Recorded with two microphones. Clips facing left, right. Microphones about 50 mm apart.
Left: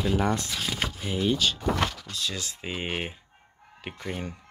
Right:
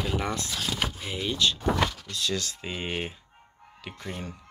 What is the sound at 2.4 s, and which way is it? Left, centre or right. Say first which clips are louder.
Speech: left 1 dB; centre.